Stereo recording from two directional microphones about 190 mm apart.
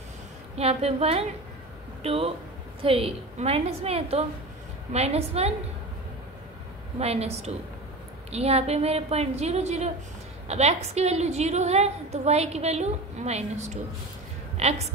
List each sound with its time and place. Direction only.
0.6 s a woman's voice: 30° right (ahead or behind)
7.0 s a woman's voice: 35° right (ahead or behind)